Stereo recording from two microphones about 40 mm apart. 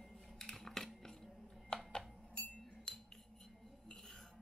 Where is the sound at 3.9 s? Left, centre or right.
Centre.